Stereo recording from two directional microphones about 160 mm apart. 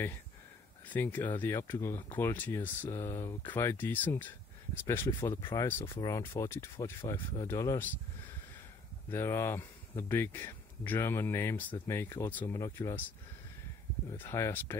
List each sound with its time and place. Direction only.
0.8 s speech: 10° left (ahead or behind)
5.4 s speech: 25° left (ahead or behind)
5.7 s speech: 15° left (ahead or behind)
9.1 s speech: 15° left (ahead or behind)
14.1 s speech: 15° left (ahead or behind)